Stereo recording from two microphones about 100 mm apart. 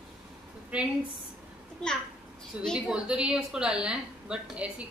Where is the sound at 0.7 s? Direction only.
10° right (ahead or behind).